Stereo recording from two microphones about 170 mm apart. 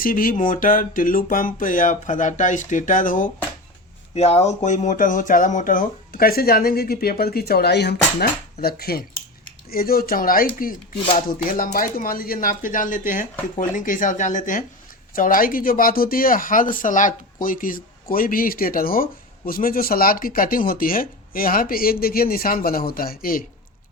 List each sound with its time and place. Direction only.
0.0 s speech: 55° left (ahead or behind)
4.1 s speech: 40° left (ahead or behind); by 23.5 s 55° left (ahead or behind)